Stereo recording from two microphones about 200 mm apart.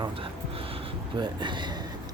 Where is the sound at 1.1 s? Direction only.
20° right (ahead or behind).